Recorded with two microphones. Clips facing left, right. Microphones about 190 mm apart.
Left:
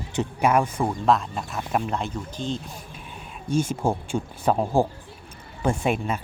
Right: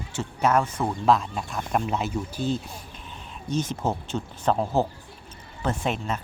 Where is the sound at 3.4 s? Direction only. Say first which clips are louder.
Left 3 dB; 10° left (ahead or behind).